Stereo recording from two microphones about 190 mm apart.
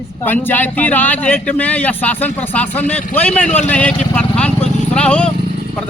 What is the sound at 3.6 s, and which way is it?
Vehicle, 5° left (ahead or behind).